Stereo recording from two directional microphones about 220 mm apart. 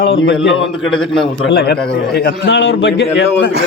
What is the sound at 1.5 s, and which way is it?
A man's voice, 45° left (ahead or behind).